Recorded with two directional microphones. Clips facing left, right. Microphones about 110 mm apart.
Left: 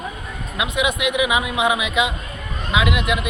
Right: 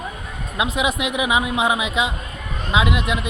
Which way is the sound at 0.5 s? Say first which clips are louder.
Right 1 dB; 35° right (ahead or behind).